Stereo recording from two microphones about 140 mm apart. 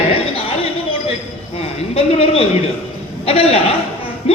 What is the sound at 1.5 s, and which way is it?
A woman's voice, 45° left (ahead or behind).